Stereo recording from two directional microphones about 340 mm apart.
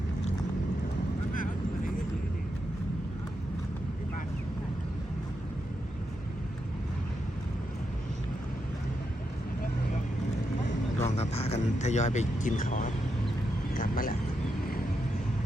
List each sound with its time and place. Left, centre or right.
1.3 s vehicle: left
11.0 s speech: centre
13.7 s vehicle: left